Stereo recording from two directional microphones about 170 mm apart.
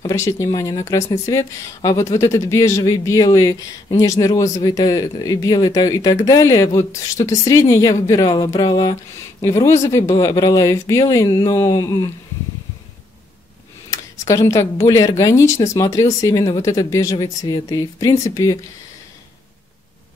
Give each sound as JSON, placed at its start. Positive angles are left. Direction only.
{"t": 0.0, "sound": "speech", "side_deg": 15}
{"t": 13.8, "sound": "speech", "side_deg": 20}